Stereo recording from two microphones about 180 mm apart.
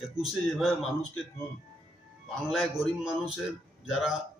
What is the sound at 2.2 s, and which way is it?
Speech, centre (ahead or behind).